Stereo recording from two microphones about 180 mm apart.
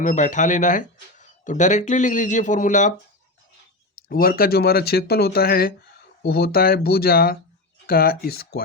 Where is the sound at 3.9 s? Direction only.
55° left (ahead or behind).